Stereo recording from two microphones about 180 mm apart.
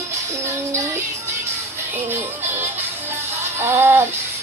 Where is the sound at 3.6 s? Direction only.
15° right (ahead or behind).